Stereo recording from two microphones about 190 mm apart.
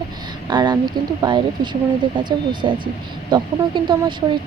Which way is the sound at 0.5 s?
20° right (ahead or behind).